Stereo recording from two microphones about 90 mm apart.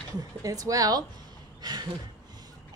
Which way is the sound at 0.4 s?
40° right (ahead or behind).